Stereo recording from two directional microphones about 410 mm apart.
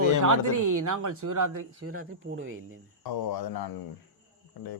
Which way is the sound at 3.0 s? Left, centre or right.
Left.